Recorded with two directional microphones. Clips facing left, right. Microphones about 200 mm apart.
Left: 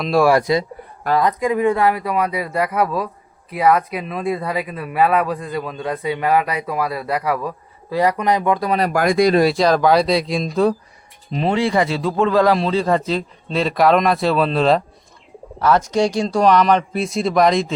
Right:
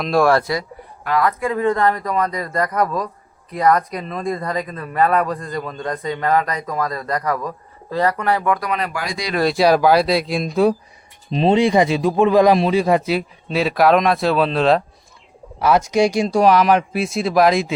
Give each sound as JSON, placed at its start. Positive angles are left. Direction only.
{"t": 0.0, "sound": "speech", "side_deg": 5}
{"t": 8.8, "sound": "speech", "side_deg": 50}
{"t": 9.6, "sound": "speech", "side_deg": -10}
{"t": 11.3, "sound": "a man's voice", "side_deg": -20}